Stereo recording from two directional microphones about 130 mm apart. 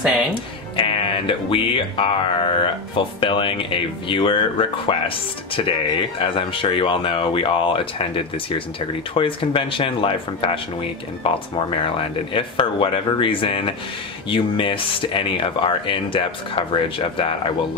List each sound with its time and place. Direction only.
0.3 s speech: 40° left (ahead or behind)